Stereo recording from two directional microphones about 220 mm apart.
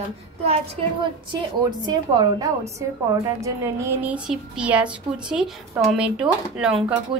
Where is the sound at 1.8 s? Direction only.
20° right (ahead or behind).